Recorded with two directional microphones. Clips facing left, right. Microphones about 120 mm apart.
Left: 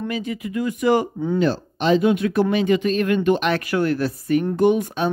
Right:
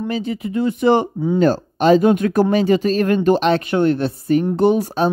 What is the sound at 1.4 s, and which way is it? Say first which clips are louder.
Speech: right 7 dB; 45° right (ahead or behind).